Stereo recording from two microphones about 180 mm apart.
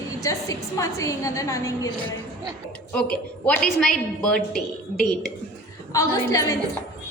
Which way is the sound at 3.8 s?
5° left (ahead or behind).